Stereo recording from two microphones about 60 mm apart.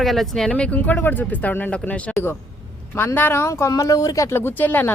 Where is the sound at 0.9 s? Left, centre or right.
Left.